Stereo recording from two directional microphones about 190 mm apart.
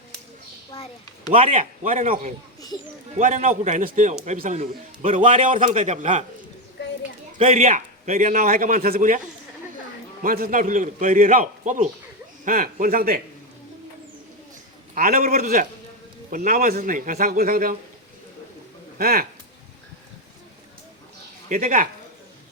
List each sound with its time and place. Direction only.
1.4 s a man's voice: 40° right (ahead or behind)
7.3 s a man's voice: 35° right (ahead or behind)
10.2 s a man's voice: 50° right (ahead or behind)
14.9 s a man's voice: 45° right (ahead or behind)
18.9 s a man's voice: 50° right (ahead or behind)
21.5 s a man's voice: 45° right (ahead or behind)